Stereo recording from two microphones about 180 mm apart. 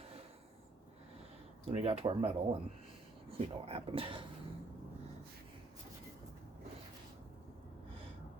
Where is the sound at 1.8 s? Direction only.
35° right (ahead or behind).